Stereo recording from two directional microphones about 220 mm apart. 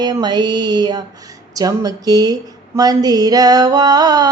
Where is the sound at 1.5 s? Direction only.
15° right (ahead or behind).